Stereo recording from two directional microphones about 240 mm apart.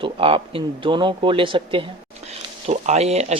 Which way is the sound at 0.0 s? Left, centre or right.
Right.